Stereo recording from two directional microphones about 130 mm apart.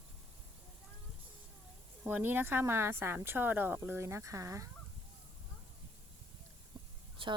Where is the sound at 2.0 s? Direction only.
15° right (ahead or behind).